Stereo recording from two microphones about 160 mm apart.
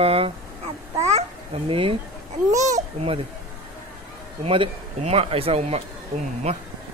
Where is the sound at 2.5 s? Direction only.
50° right (ahead or behind).